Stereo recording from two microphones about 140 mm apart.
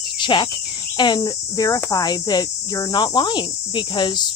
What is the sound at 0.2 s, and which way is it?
Cricket, 35° left (ahead or behind).